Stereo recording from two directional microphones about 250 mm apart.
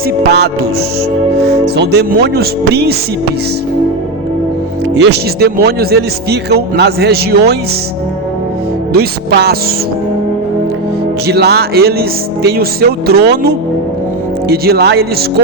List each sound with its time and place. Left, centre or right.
0.3 s speech: right
1.6 s speech: right
4.9 s speech: right
8.9 s speech: right
11.3 s speech: right